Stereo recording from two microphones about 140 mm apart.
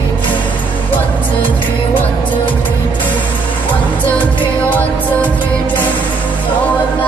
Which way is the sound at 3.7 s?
10° left (ahead or behind).